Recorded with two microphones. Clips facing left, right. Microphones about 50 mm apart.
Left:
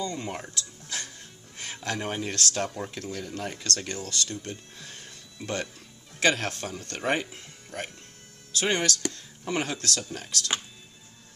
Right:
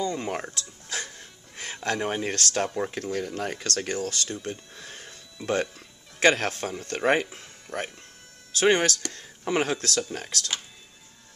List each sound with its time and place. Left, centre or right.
0.0 s speech: right
0.4 s a sound: right
2.0 s speech: centre
2.2 s speech: right
2.6 s speech: right
6.1 s speech: right
7.7 s speech: right
8.5 s speech: right
9.0 s speech: centre
9.6 s speech: right